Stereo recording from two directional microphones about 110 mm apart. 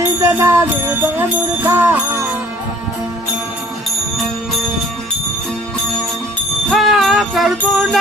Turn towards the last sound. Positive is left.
turn(degrees=0)  # may be behind; listen again after turning